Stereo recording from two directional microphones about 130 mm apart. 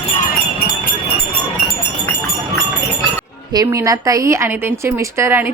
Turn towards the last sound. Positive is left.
turn(degrees=-20)  # may be behind; listen again after turning